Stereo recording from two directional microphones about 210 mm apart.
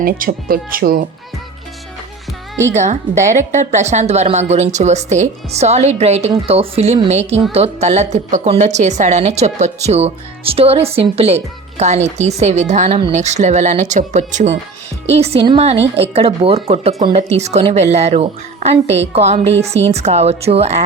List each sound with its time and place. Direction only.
0.0 s speech: 45° right (ahead or behind)
2.7 s a woman's voice: 35° right (ahead or behind)